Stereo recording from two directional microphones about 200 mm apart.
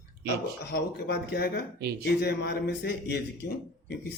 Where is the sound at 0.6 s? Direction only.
55° left (ahead or behind).